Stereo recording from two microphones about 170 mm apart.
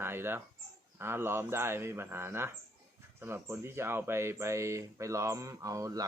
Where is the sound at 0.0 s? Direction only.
15° right (ahead or behind).